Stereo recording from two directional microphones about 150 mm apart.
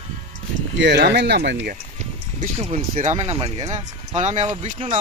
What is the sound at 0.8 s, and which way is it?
Speech, 90° right.